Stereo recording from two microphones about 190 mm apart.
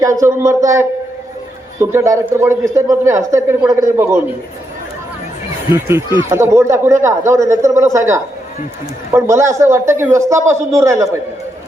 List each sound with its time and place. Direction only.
0.0 s a man's voice: 15° right (ahead or behind)
5.7 s a man's voice: 15° right (ahead or behind)
9.3 s a man's voice: 15° right (ahead or behind)